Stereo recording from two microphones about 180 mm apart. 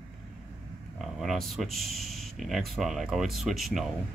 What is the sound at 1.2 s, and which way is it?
Speech, centre (ahead or behind).